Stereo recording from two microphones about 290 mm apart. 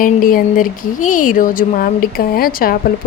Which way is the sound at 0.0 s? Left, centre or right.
Left.